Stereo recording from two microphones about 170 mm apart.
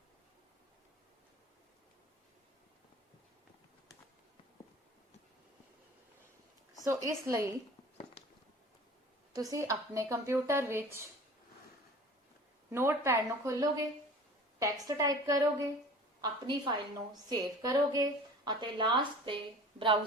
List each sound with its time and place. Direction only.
6.8 s a woman's voice: 20° right (ahead or behind)
9.3 s a woman's voice: 20° right (ahead or behind)
12.7 s a woman's voice: 15° right (ahead or behind); by 19.4 s 30° right (ahead or behind)